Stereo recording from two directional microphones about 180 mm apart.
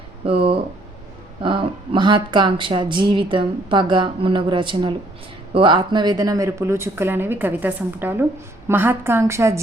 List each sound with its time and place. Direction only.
0.3 s speech: 30° right (ahead or behind); by 9.6 s 15° right (ahead or behind)